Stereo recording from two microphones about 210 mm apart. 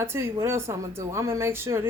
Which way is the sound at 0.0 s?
15° right (ahead or behind).